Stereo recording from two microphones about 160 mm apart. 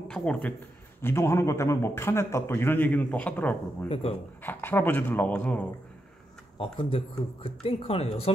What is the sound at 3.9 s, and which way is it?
Speech, 35° left (ahead or behind).